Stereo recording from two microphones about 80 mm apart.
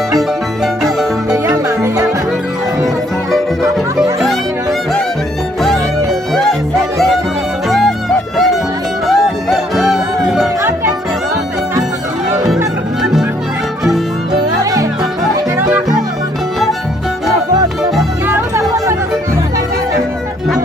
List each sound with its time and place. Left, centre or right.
0.2 s music: centre
1.3 s music: right
6.3 s music: centre
7.7 s music: centre
9.0 s music: centre
10.6 s music: right
13.0 s music: centre
14.6 s music: right